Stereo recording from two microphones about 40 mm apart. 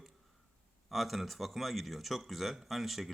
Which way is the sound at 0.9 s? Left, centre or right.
Centre.